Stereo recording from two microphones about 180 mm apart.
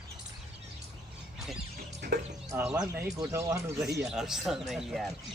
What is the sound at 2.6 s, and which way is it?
Speech, 10° right (ahead or behind).